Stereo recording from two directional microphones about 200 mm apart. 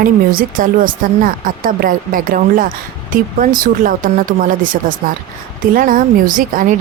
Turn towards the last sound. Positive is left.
turn(degrees=-40)  # may be behind; listen again after turning